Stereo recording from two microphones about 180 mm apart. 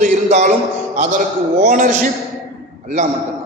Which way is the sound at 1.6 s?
45° right (ahead or behind).